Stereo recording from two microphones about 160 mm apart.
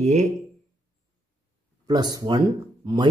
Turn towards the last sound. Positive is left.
turn(degrees=-30)  # may be behind; listen again after turning